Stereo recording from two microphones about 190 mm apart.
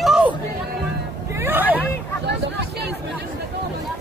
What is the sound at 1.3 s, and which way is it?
Speech, 10° right (ahead or behind).